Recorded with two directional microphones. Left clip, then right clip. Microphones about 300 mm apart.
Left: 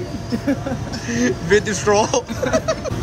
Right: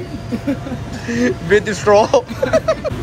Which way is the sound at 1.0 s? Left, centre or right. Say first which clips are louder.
Right 3 dB; centre.